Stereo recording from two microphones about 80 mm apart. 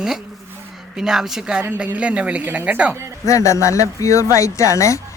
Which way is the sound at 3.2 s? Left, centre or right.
Left.